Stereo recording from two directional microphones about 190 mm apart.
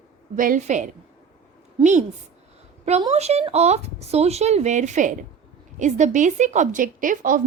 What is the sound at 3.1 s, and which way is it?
A woman's voice, 35° right (ahead or behind).